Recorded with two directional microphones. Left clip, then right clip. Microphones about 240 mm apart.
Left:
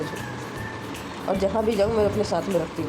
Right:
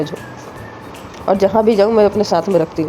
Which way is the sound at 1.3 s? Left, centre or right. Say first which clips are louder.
Right 11 dB; right.